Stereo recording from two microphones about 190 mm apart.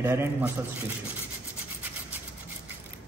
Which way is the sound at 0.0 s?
10° right (ahead or behind).